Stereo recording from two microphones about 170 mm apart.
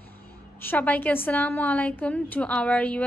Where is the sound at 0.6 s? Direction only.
10° left (ahead or behind).